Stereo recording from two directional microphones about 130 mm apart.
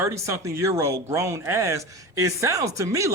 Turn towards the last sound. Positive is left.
turn(degrees=-25)  # may be behind; listen again after turning